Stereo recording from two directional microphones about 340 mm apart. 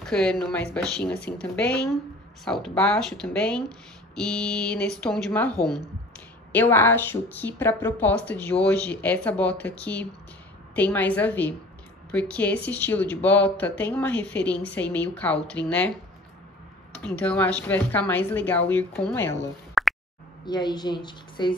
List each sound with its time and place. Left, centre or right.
0.0 s speech: centre
16.9 s speech: centre
20.4 s a woman's voice: centre